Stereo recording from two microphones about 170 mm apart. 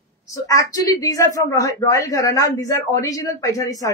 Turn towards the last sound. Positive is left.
turn(degrees=20)  # may be behind; listen again after turning